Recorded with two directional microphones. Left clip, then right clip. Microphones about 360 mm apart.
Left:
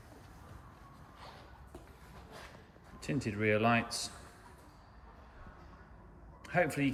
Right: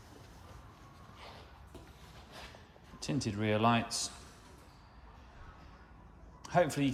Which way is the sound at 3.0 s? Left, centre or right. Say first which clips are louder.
Left 2 dB; centre.